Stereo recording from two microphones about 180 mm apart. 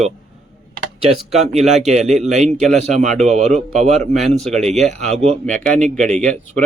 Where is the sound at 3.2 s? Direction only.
40° right (ahead or behind).